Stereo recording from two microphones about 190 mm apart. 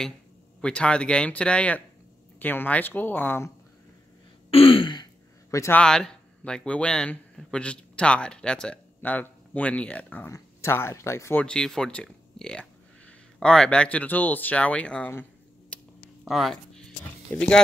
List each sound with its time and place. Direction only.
0.6 s speech: 5° left (ahead or behind)
4.5 s throat clearing: 30° left (ahead or behind)
5.5 s speech: 15° left (ahead or behind)
16.3 s a sound: centre (ahead or behind)